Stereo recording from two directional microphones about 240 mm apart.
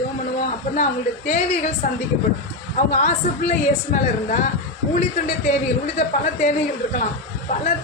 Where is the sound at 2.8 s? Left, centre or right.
Left.